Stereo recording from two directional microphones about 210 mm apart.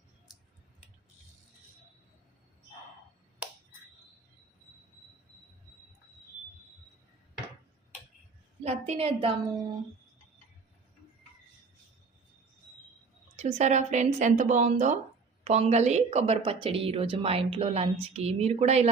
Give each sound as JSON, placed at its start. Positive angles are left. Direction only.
{"t": 8.6, "sound": "speech", "side_deg": -30}
{"t": 13.3, "sound": "speech", "side_deg": -30}